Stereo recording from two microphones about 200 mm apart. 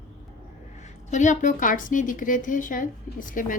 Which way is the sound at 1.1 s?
40° left (ahead or behind).